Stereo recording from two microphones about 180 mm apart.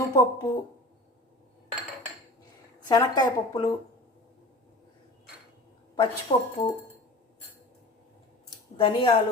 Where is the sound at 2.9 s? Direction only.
20° left (ahead or behind).